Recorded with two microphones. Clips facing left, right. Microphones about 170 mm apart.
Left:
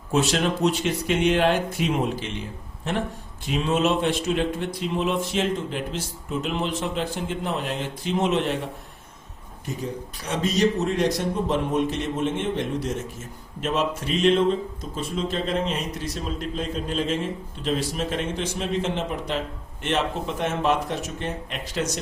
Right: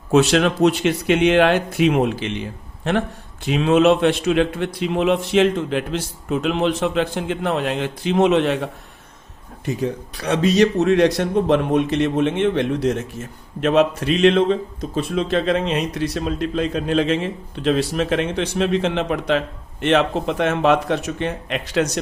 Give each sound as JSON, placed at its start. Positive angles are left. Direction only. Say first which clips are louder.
{"t": 0.1, "sound": "a man's voice", "louder": "right 7 dB", "side_deg": -75}
{"t": 9.6, "sound": "a man's voice", "louder": "right 7 dB", "side_deg": -75}